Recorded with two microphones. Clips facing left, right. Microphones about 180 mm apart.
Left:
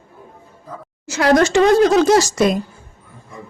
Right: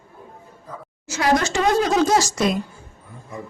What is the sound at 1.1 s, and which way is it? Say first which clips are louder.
Speech: left 6 dB; 70° left (ahead or behind).